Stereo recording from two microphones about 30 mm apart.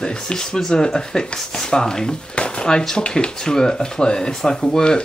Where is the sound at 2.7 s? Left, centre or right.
Left.